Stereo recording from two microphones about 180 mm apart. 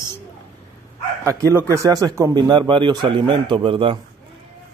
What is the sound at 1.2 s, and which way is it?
Speech, 15° right (ahead or behind).